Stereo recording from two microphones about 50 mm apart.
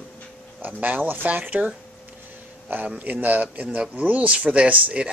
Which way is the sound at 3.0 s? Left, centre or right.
Right.